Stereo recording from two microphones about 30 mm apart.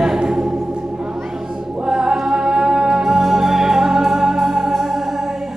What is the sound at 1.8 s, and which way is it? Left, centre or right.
Music, centre.